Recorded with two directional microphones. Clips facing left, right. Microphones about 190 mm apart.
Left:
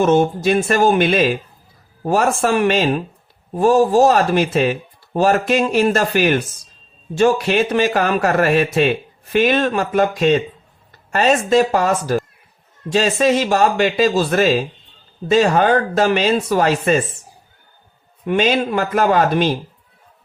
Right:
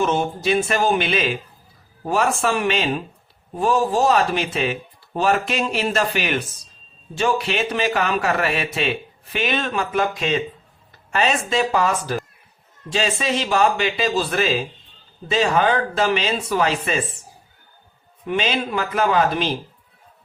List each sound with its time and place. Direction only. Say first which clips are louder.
0.0 s a man's voice: left 7 dB; 45° left (ahead or behind)
18.3 s a man's voice: left 6 dB; 45° left (ahead or behind)